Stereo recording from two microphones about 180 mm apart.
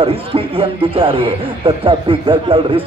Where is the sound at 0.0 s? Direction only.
30° right (ahead or behind).